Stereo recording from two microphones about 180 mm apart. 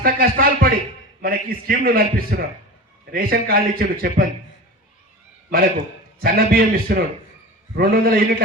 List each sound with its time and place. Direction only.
0.0 s a man's voice: 55° right (ahead or behind)
5.7 s a man's voice: 55° right (ahead or behind)